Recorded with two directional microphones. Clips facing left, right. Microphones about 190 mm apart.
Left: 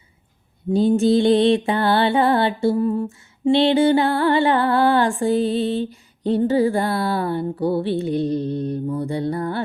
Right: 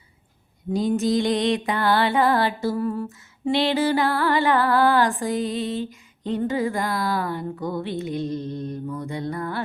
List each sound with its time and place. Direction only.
0.7 s music: 30° left (ahead or behind)